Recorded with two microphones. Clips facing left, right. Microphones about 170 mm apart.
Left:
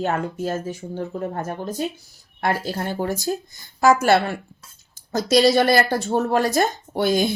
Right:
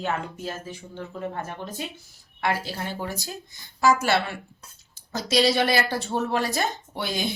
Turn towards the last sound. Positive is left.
turn(degrees=45)  # may be behind; listen again after turning